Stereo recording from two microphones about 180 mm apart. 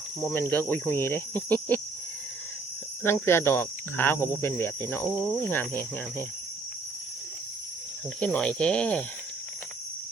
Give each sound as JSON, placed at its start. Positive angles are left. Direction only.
{"t": 0.2, "sound": "cricket", "side_deg": 10}
{"t": 3.2, "sound": "cricket", "side_deg": 15}
{"t": 8.2, "sound": "cricket", "side_deg": 5}